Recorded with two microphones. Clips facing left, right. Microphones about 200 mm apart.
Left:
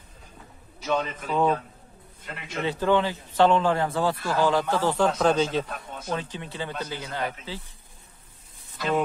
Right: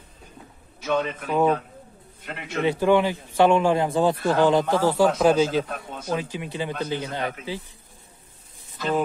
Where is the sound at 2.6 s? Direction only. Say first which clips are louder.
Right 4 dB; 15° right (ahead or behind).